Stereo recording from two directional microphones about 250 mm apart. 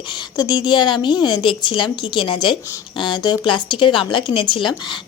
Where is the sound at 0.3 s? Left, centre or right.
Centre.